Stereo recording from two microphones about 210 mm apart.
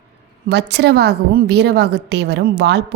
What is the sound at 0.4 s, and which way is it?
A woman's voice, 55° right (ahead or behind).